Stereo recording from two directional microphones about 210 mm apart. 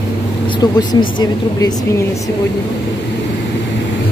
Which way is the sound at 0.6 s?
20° left (ahead or behind).